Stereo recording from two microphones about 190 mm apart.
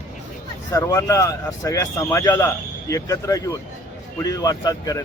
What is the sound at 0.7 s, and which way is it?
A man's voice, 15° left (ahead or behind).